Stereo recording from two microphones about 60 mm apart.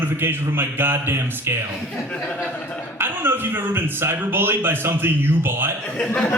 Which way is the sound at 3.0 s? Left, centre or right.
Right.